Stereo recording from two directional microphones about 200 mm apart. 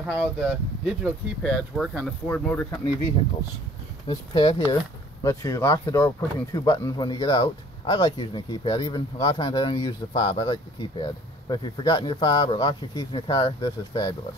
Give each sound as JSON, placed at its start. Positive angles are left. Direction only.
{"t": 0.0, "sound": "speech", "side_deg": -5}
{"t": 4.1, "sound": "speech", "side_deg": 20}